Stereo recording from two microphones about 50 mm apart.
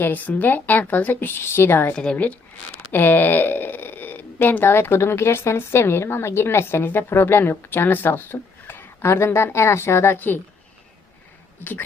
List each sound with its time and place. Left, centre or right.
0.0 s a woman's voice: left
1.4 s speech: left
1.9 s a woman's voice: centre
2.1 s a woman's voice: left
2.9 s speech: left